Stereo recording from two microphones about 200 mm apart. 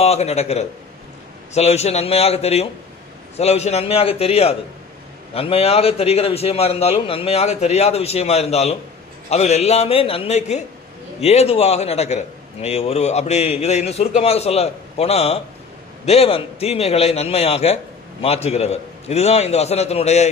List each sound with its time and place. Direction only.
0.0 s a man's voice: 30° left (ahead or behind)